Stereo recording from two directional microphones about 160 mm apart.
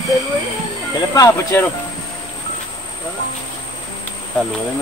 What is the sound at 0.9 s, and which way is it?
Speech, 20° left (ahead or behind).